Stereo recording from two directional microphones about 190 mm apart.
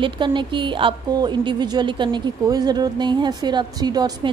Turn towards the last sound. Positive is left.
turn(degrees=-20)  # may be behind; listen again after turning